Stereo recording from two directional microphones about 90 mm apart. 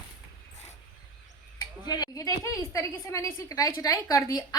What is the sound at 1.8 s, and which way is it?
A woman's voice, 50° left (ahead or behind).